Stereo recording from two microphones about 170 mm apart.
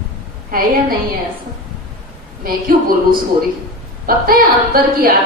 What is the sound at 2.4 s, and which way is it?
A woman's voice, 60° right (ahead or behind).